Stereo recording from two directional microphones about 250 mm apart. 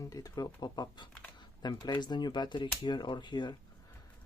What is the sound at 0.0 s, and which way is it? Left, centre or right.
Speech, centre.